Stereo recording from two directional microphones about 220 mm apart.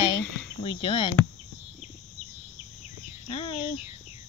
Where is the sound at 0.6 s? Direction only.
20° left (ahead or behind).